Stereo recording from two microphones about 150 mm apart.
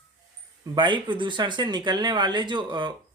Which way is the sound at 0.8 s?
30° right (ahead or behind).